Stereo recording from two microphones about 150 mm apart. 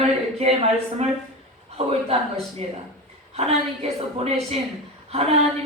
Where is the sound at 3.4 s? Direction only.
40° right (ahead or behind).